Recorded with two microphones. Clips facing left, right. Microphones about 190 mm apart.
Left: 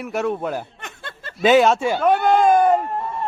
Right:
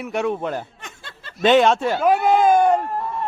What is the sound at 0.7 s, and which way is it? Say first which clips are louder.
Snicker: left 4 dB; 60° left (ahead or behind).